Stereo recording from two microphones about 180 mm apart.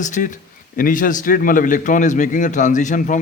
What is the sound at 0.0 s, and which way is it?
A man's voice, 45° left (ahead or behind).